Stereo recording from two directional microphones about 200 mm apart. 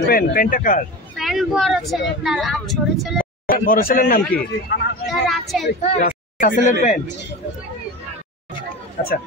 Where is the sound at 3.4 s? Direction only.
45° left (ahead or behind).